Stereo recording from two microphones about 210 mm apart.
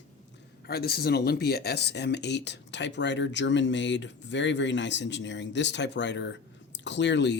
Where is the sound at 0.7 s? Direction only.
50° left (ahead or behind).